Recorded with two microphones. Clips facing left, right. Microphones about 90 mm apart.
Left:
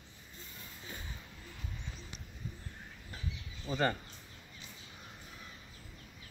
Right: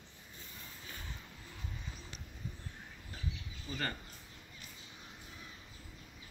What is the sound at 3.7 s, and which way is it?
Speech, 30° left (ahead or behind).